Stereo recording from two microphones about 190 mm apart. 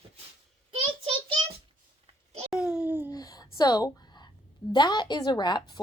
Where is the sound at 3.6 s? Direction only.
20° left (ahead or behind).